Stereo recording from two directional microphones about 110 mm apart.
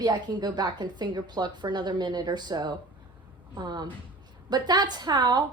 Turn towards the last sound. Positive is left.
turn(degrees=-40)  # may be behind; listen again after turning